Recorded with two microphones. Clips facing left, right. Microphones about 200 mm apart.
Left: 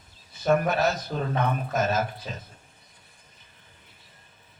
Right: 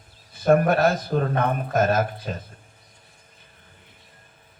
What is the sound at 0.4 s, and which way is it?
A man's voice, 55° right (ahead or behind).